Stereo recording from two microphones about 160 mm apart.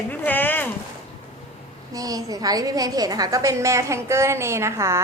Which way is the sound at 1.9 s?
20° right (ahead or behind).